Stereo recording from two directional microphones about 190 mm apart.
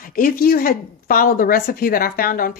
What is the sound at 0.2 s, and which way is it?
Speech, 50° left (ahead or behind).